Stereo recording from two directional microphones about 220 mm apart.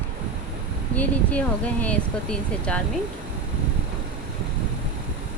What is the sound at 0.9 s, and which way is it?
Speech, 5° left (ahead or behind).